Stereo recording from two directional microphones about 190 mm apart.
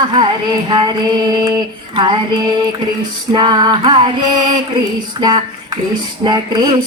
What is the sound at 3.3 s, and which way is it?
Speech, 20° right (ahead or behind).